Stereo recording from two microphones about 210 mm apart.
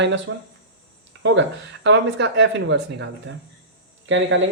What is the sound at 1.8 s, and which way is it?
Speech, 55° right (ahead or behind).